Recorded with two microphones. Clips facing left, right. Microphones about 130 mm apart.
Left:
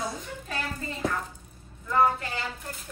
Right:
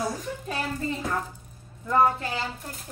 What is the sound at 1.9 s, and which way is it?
Speech, 25° right (ahead or behind).